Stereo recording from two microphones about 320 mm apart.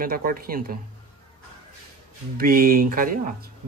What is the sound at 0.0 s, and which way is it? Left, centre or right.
Speech, right.